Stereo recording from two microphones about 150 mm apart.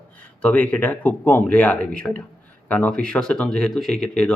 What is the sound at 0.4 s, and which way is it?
Speech, 10° left (ahead or behind).